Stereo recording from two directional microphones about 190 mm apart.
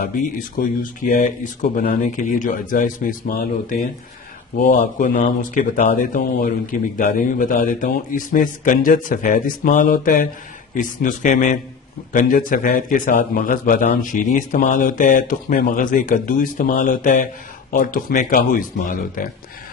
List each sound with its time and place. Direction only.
0.0 s a man's voice: 45° left (ahead or behind)